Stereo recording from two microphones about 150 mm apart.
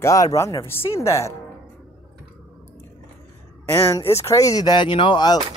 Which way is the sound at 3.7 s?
20° left (ahead or behind).